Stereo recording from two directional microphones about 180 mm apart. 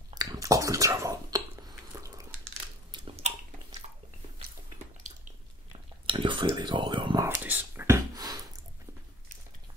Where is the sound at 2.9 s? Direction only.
35° right (ahead or behind).